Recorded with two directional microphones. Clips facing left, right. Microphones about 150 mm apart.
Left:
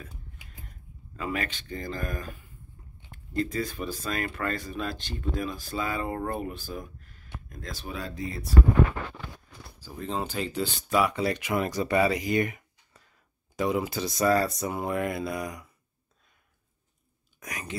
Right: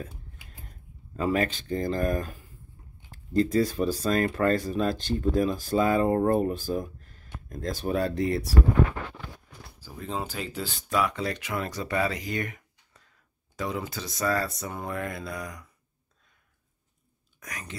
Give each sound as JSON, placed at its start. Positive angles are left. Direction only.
{"t": 1.1, "sound": "speech", "side_deg": -40}
{"t": 9.8, "sound": "speech", "side_deg": -5}
{"t": 17.4, "sound": "speech", "side_deg": 10}